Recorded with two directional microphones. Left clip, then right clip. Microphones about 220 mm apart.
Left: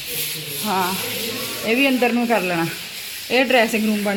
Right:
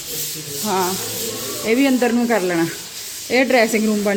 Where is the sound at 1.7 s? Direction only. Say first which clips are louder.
Right 1 dB; 15° right (ahead or behind).